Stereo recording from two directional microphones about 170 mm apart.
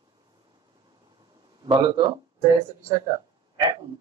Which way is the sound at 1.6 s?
25° right (ahead or behind).